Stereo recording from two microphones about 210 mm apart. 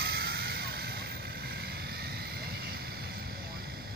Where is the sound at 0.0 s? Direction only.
50° right (ahead or behind).